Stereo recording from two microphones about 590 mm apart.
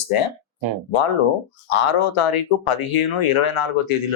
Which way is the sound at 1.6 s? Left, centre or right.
Left.